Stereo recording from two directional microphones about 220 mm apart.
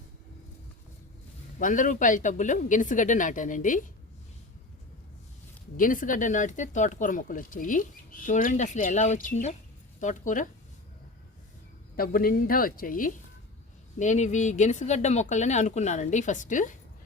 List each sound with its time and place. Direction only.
1.5 s speech: 35° left (ahead or behind)
5.7 s speech: 40° left (ahead or behind)
11.9 s speech: 40° left (ahead or behind)